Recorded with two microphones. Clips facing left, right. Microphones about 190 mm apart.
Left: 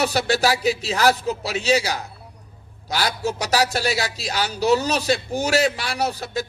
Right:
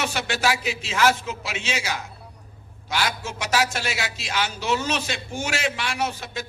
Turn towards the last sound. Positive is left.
turn(degrees=35)  # may be behind; listen again after turning